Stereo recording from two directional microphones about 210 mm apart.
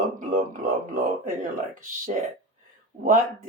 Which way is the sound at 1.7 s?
40° right (ahead or behind).